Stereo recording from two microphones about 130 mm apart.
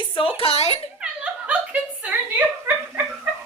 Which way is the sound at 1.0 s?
10° right (ahead or behind).